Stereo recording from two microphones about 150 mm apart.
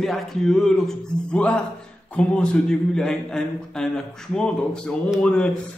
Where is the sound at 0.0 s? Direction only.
Centre (ahead or behind).